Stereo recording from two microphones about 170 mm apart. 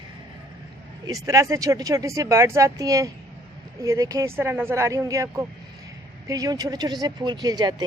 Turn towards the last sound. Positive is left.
turn(degrees=-25)  # may be behind; listen again after turning